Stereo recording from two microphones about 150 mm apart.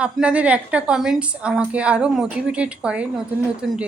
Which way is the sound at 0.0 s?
10° right (ahead or behind).